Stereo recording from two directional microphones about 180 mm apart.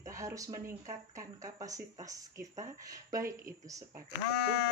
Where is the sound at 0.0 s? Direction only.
15° right (ahead or behind).